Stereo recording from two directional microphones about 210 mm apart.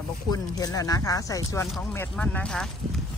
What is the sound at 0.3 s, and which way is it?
Speech, 15° left (ahead or behind).